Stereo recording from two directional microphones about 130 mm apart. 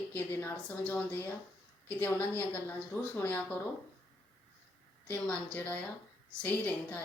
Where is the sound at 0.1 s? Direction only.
20° left (ahead or behind).